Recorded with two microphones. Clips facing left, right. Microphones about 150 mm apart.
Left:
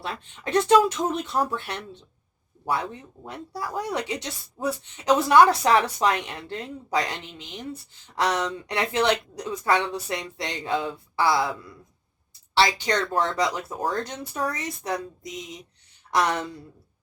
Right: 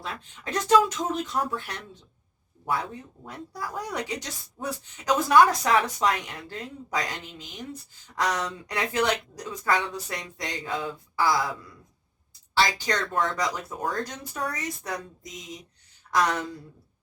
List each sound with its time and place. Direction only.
0.1 s speech: 30° left (ahead or behind)
3.2 s speech: 25° left (ahead or behind)
12.5 s speech: 25° left (ahead or behind)
16.1 s speech: 25° left (ahead or behind)